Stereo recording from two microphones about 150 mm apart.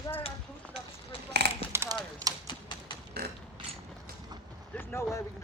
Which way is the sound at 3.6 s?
35° right (ahead or behind).